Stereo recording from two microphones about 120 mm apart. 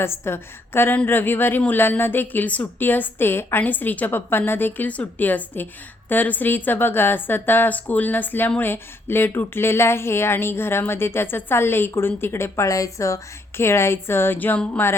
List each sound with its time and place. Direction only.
0.0 s a woman's voice: 20° left (ahead or behind)